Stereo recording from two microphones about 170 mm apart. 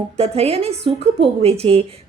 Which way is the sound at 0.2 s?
35° right (ahead or behind).